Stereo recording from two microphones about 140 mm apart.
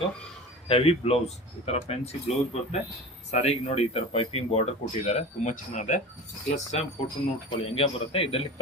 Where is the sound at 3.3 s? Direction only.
50° left (ahead or behind).